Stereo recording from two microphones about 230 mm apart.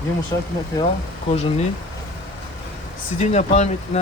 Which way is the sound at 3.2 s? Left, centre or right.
Left.